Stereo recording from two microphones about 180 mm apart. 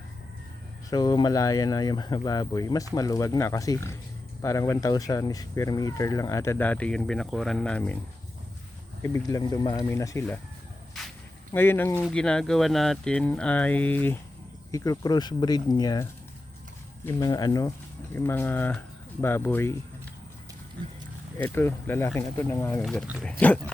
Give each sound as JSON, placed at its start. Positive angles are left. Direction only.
{"t": 0.9, "sound": "speech", "side_deg": 20}
{"t": 9.1, "sound": "speech", "side_deg": 20}
{"t": 11.5, "sound": "speech", "side_deg": 10}
{"t": 17.1, "sound": "speech", "side_deg": 20}
{"t": 21.3, "sound": "speech", "side_deg": 10}